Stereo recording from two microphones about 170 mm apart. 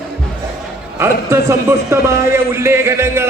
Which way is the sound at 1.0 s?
15° right (ahead or behind).